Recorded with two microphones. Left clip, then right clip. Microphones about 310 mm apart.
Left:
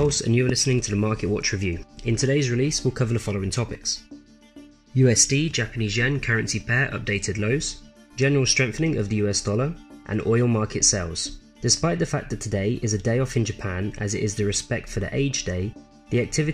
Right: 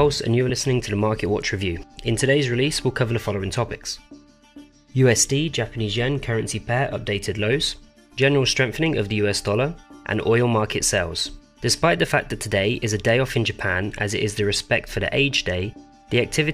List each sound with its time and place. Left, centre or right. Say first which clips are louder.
0.0 s speech: right 3 dB; right
4.9 s speech: right 2 dB; right